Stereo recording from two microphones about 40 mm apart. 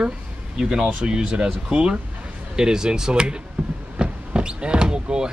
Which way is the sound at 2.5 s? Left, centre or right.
Centre.